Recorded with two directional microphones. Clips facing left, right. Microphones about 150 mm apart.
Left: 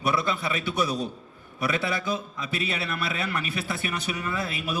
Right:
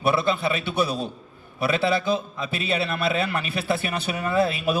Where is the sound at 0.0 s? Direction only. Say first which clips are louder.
Right 4 dB; 25° right (ahead or behind).